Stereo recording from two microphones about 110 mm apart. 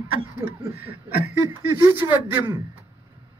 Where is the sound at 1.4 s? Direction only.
30° right (ahead or behind).